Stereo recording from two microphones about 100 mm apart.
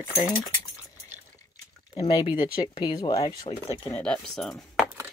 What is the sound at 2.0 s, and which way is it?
Speech, 45° left (ahead or behind).